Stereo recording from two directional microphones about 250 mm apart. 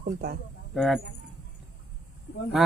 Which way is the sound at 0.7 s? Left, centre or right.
Centre.